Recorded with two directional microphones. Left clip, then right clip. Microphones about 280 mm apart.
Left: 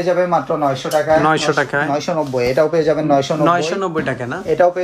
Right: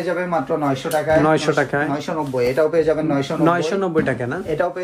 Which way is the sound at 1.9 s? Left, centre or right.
Left.